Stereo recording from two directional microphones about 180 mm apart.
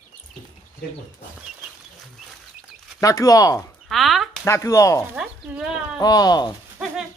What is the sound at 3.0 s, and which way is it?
Speech, 20° left (ahead or behind).